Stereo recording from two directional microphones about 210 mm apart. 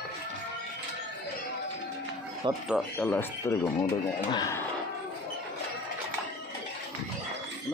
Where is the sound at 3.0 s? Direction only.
10° left (ahead or behind).